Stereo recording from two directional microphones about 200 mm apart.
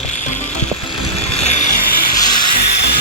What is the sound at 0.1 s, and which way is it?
Music, 40° left (ahead or behind).